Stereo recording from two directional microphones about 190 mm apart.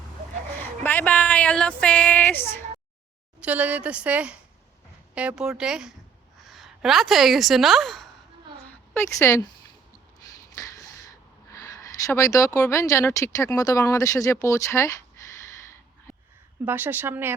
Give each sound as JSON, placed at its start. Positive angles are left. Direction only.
{"t": 0.9, "sound": "speech", "side_deg": 10}
{"t": 3.4, "sound": "a woman's voice", "side_deg": -5}
{"t": 9.1, "sound": "speech", "side_deg": 15}
{"t": 11.5, "sound": "speech", "side_deg": 15}
{"t": 16.6, "sound": "a woman's voice", "side_deg": -10}